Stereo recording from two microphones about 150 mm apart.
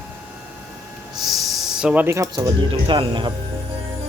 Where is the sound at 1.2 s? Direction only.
Centre (ahead or behind); by 3.3 s 30° right (ahead or behind).